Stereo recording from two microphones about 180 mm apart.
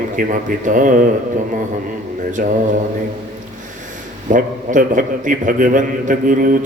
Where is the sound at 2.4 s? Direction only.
50° right (ahead or behind).